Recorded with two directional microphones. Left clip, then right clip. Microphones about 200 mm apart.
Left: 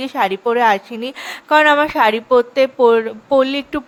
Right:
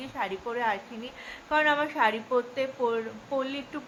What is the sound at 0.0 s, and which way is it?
A woman's voice, 50° left (ahead or behind).